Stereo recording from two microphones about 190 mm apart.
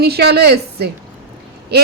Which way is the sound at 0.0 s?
55° right (ahead or behind).